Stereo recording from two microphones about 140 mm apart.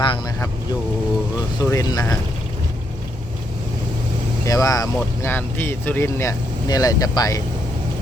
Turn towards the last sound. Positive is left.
turn(degrees=25)  # may be behind; listen again after turning